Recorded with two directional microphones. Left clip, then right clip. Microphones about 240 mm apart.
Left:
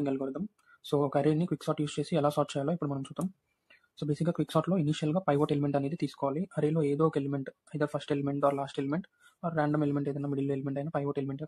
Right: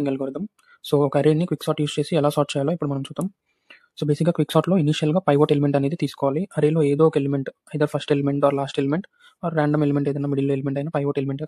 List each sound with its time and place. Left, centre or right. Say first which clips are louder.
0.0 s speech: right 8 dB; right